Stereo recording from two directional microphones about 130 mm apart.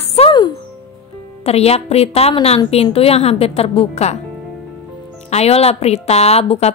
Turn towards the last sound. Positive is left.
turn(degrees=50)  # may be behind; listen again after turning